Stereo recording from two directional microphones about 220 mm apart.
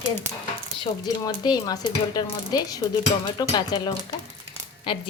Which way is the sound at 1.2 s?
20° left (ahead or behind).